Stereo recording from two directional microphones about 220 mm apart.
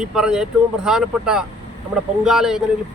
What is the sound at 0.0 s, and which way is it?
Speech, 5° right (ahead or behind).